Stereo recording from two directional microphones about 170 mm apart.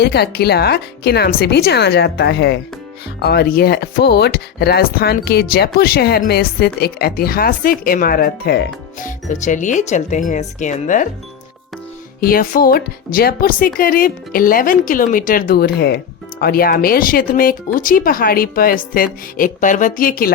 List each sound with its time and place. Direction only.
0.0 s speech: 70° left (ahead or behind)
3.2 s speech: 70° left (ahead or behind)
9.0 s speech: 45° left (ahead or behind)
12.2 s speech: 60° left (ahead or behind)